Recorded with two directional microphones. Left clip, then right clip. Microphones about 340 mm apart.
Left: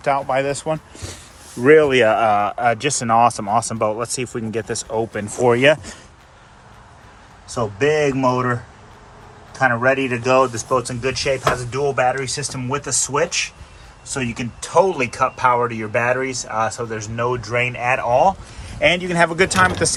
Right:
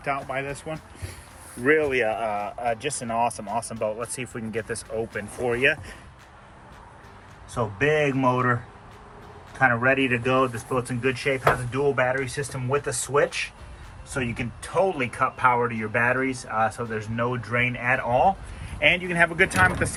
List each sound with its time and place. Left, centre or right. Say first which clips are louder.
0.0 s speech: left 10 dB; centre
1.6 s speech: left 9 dB; left
4.2 s speech: left 7 dB; centre
4.9 s speech: left 9 dB; left
7.5 s speech: left 5 dB; centre
9.6 s speech: left 4 dB; centre